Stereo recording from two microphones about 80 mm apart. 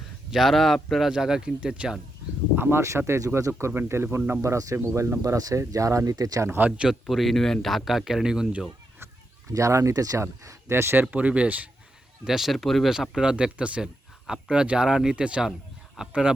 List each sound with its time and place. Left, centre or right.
0.3 s speech: centre
2.6 s speech: right
6.7 s speech: centre
7.1 s speech: centre
9.5 s speech: right
11.1 s speech: centre
12.2 s speech: centre